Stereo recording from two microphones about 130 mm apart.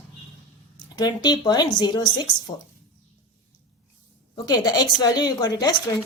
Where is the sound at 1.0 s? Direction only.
30° left (ahead or behind).